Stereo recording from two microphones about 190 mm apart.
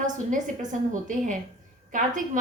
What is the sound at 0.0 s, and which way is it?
A woman's voice, 40° right (ahead or behind).